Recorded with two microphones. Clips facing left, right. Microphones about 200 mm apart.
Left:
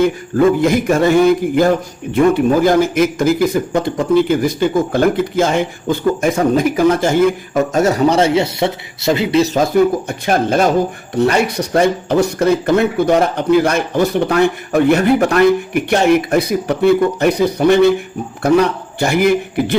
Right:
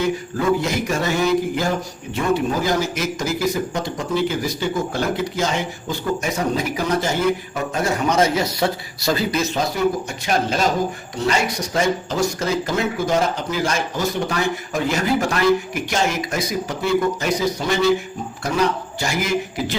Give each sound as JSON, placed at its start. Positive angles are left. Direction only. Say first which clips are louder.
{"t": 0.0, "sound": "a man's voice", "louder": "left 8 dB", "side_deg": 55}
{"t": 9.4, "sound": "a man's voice", "louder": "left 8 dB", "side_deg": 45}